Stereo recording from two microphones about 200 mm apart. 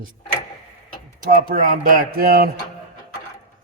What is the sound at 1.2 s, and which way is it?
A man's voice, 45° right (ahead or behind).